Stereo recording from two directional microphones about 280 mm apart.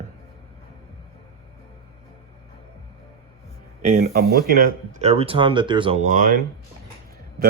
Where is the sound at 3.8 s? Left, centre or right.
Right.